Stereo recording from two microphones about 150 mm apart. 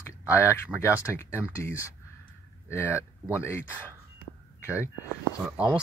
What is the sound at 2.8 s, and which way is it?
Speech, 10° right (ahead or behind).